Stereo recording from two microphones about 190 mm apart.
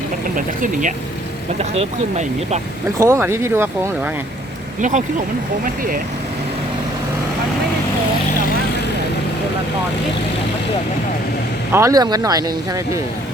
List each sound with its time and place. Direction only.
0.3 s speech: 45° right (ahead or behind)
1.5 s speech: 35° right (ahead or behind)
3.0 s speech: 15° right (ahead or behind)
4.8 s speech: 40° right (ahead or behind)
11.7 s speech: 15° right (ahead or behind)